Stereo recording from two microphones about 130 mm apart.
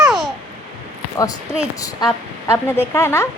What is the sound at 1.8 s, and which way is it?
A woman's voice, 25° left (ahead or behind).